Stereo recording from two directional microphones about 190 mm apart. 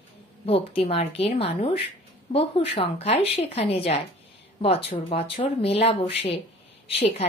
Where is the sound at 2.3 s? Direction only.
30° left (ahead or behind).